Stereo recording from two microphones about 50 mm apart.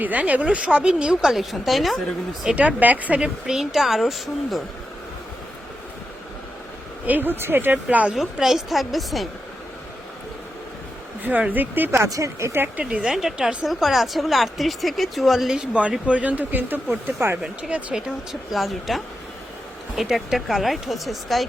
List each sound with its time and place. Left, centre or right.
0.0 s speech: right; by 2.0 s centre
2.6 s speech: right
3.2 s speech: centre
7.0 s speech: right
7.9 s speech: right
8.1 s speech: centre
11.2 s speech: right
11.9 s speech: right
12.8 s speech: centre
13.1 s speech: centre
15.5 s speech: right
17.4 s speech: right
18.5 s speech: centre